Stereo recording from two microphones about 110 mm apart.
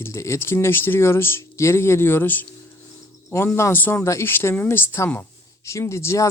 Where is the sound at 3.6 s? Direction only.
20° left (ahead or behind).